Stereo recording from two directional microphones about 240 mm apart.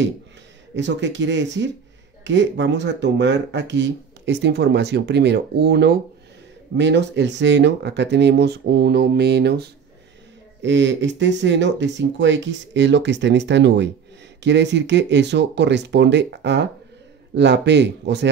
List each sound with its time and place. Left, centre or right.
0.7 s speech: right